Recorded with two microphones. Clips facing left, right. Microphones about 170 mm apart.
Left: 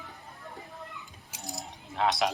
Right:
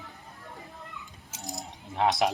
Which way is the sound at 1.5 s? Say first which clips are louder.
Right 2 dB; 20° right (ahead or behind).